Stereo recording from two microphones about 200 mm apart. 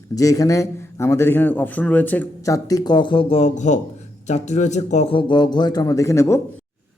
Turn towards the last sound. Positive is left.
turn(degrees=15)  # may be behind; listen again after turning